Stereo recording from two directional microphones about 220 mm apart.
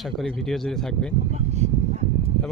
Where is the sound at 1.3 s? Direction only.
30° right (ahead or behind).